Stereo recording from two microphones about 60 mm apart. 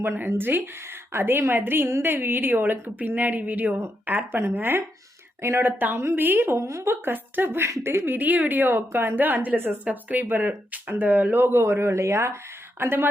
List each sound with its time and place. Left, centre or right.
0.2 s a woman's voice: right
5.4 s speech: right
5.6 s a woman's voice: right
6.6 s speech: right
7.0 s a woman's voice: right
8.2 s a woman's voice: right
11.3 s speech: right
12.8 s a woman's voice: right